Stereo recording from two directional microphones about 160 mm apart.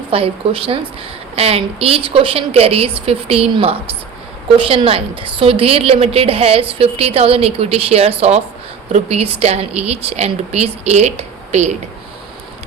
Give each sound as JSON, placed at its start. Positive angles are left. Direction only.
{"t": 0.1, "sound": "a woman's voice", "side_deg": -35}